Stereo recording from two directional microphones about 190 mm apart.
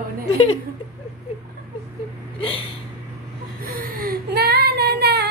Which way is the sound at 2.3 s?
30° left (ahead or behind).